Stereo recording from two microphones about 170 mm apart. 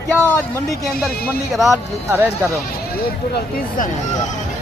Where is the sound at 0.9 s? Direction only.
5° left (ahead or behind).